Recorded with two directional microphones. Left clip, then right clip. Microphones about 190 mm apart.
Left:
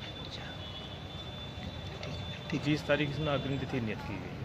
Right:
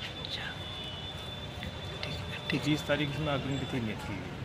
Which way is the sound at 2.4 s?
5° left (ahead or behind).